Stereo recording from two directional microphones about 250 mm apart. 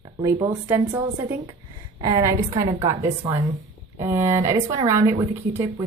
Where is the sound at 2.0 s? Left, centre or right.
Centre.